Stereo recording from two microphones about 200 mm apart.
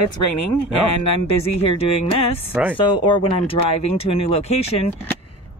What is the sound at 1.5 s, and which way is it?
Speech, 30° left (ahead or behind).